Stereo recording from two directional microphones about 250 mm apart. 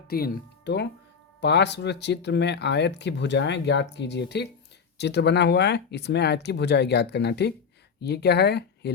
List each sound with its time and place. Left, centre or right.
0.1 s speech: left